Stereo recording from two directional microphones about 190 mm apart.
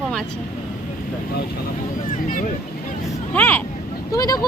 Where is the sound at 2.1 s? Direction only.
45° left (ahead or behind).